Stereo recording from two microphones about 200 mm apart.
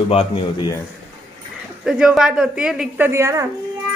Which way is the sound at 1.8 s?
5° right (ahead or behind).